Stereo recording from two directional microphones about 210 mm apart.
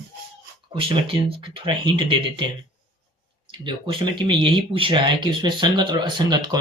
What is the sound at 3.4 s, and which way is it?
Speech, 25° right (ahead or behind).